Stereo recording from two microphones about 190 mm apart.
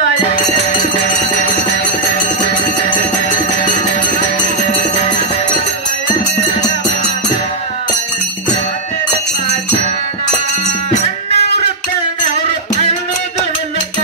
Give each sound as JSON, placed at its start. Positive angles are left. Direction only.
{"t": 1.0, "sound": "music", "side_deg": 45}
{"t": 10.9, "sound": "music", "side_deg": 35}